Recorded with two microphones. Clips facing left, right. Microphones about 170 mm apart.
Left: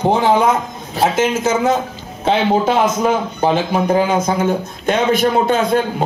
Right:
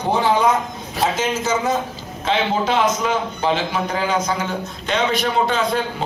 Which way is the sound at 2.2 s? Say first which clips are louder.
Left 5 dB; 55° left (ahead or behind).